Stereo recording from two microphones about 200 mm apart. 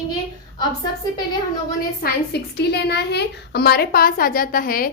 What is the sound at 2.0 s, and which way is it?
A woman's voice, 55° left (ahead or behind).